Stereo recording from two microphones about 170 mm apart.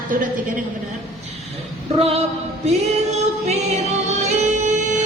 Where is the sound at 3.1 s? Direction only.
40° right (ahead or behind).